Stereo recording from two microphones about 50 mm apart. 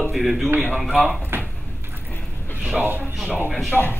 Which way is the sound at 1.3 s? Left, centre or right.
Right.